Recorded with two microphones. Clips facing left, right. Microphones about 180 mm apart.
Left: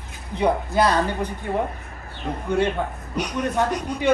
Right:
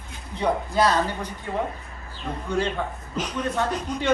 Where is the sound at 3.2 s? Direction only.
10° left (ahead or behind).